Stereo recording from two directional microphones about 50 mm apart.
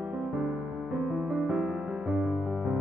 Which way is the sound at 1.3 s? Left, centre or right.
Centre.